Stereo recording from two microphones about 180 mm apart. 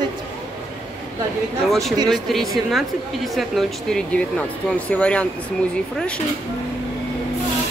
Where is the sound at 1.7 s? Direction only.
Centre (ahead or behind).